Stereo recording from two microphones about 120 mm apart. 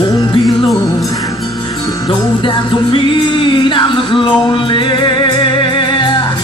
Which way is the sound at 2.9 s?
45° left (ahead or behind).